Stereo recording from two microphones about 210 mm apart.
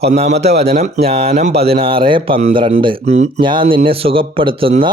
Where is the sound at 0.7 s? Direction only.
45° right (ahead or behind).